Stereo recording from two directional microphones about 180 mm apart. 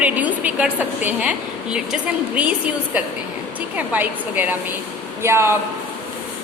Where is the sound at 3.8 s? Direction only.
10° right (ahead or behind).